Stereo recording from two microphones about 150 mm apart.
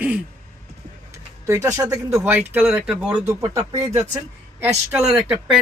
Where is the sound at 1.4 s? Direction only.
20° right (ahead or behind).